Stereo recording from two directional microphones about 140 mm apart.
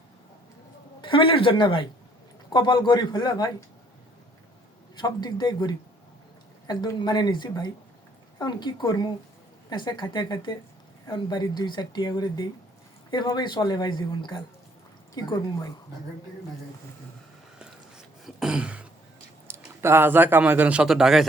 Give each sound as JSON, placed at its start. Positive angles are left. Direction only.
{"t": 1.0, "sound": "a woman's voice", "side_deg": 35}
{"t": 4.9, "sound": "a woman's voice", "side_deg": 30}
{"t": 17.6, "sound": "a sound", "side_deg": -5}
{"t": 19.5, "sound": "a man's voice", "side_deg": -15}